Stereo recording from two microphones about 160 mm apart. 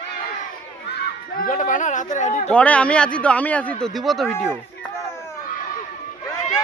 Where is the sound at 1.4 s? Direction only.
55° left (ahead or behind).